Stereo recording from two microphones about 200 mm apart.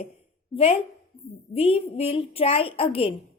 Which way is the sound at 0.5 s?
30° left (ahead or behind).